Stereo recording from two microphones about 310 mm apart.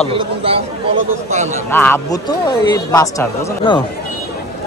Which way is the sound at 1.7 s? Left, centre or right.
Centre.